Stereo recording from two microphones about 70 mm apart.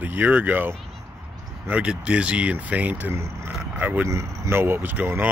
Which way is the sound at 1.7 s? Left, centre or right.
Centre.